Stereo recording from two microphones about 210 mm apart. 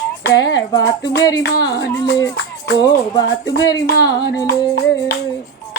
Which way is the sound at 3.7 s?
15° left (ahead or behind).